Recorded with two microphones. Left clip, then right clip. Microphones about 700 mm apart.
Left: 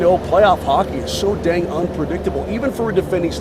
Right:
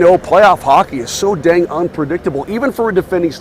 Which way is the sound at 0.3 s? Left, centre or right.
Right.